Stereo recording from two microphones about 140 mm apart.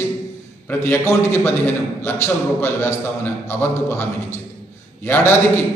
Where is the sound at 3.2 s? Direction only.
15° left (ahead or behind).